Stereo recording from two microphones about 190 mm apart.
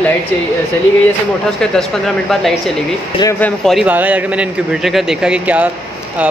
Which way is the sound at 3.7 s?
5° right (ahead or behind).